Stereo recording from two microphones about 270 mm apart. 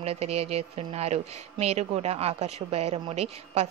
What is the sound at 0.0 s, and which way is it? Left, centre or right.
Speech, right.